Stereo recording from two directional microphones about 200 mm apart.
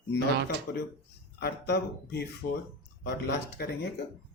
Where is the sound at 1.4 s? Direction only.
55° left (ahead or behind).